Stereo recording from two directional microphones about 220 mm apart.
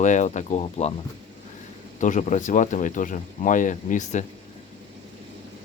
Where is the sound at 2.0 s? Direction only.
35° left (ahead or behind).